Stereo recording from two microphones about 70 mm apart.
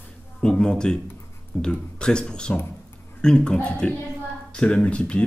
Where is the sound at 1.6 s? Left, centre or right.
Centre.